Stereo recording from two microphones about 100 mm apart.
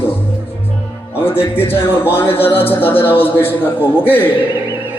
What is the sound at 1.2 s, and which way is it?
A man's voice, 20° left (ahead or behind).